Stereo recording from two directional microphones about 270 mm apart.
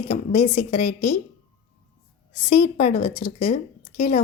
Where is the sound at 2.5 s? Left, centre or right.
Left.